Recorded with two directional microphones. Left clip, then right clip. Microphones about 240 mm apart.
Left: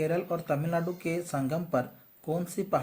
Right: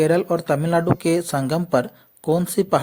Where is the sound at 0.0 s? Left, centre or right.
Right.